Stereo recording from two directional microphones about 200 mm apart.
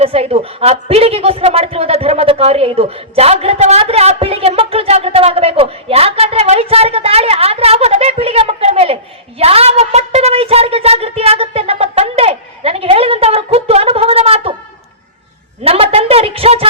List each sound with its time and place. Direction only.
0.0 s a woman's voice: 30° right (ahead or behind)
9.4 s a sound: 30° right (ahead or behind)
15.6 s a woman's voice: 30° right (ahead or behind)